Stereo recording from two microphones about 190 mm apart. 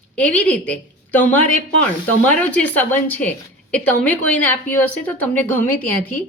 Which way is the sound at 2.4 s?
5° left (ahead or behind).